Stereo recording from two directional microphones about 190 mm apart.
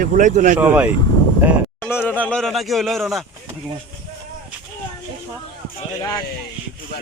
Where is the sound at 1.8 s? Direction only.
10° left (ahead or behind).